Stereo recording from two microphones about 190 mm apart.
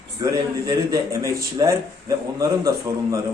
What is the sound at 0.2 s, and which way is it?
Speech, 20° right (ahead or behind).